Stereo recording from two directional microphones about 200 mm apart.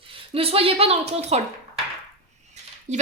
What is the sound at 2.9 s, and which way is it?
Speech, 35° right (ahead or behind).